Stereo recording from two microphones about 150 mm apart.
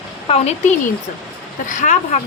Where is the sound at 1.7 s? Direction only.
55° left (ahead or behind).